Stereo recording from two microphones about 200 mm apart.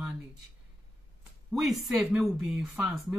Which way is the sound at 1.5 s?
Centre (ahead or behind).